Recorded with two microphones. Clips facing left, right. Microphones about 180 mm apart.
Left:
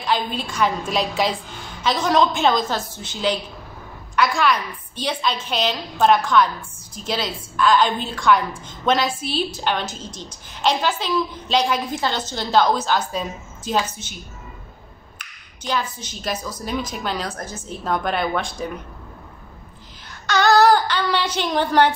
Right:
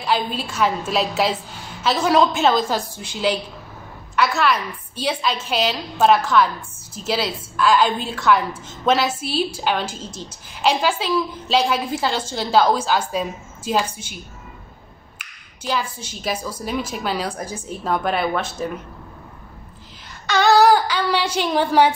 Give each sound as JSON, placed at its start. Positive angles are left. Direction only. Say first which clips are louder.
{"t": 0.0, "sound": "a woman's voice", "louder": "right 1 dB", "side_deg": -5}
{"t": 15.1, "sound": "a woman's voice", "louder": "left 1 dB", "side_deg": -10}
{"t": 20.2, "sound": "a woman's voice", "louder": "right 1 dB", "side_deg": 0}